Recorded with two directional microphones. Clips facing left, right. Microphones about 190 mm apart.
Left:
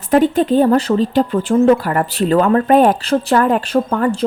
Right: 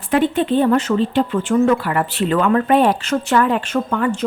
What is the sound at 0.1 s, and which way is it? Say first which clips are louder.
A woman's voice: left 4 dB; 40° left (ahead or behind).